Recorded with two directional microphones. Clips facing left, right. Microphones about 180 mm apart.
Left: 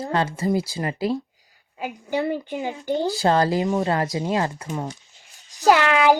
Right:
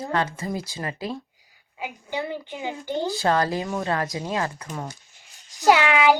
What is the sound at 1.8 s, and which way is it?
A woman's voice, 45° left (ahead or behind).